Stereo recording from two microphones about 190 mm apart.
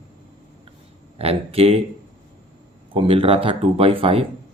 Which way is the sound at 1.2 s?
30° right (ahead or behind).